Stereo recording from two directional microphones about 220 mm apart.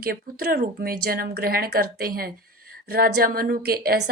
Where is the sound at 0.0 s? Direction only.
45° right (ahead or behind).